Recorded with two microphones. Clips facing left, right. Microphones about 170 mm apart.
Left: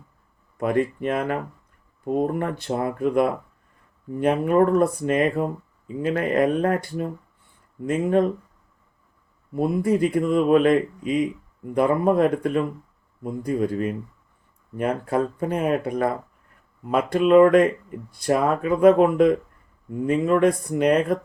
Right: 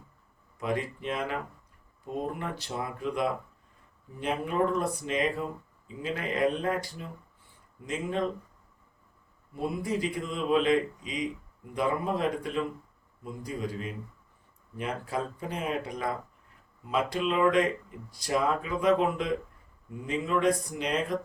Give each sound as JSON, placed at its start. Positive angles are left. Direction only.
{"t": 0.6, "sound": "speech", "side_deg": 55}
{"t": 9.6, "sound": "speech", "side_deg": 55}